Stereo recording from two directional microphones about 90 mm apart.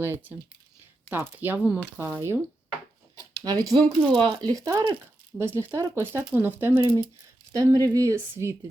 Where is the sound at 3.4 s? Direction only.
45° right (ahead or behind).